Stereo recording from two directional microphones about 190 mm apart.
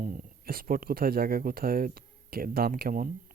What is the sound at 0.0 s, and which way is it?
Speech, 50° right (ahead or behind).